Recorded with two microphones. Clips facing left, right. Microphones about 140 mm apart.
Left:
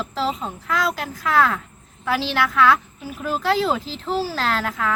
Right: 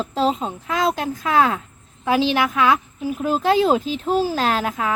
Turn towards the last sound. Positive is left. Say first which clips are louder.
# right 2 dB
turn(degrees=-20)  # may be behind; listen again after turning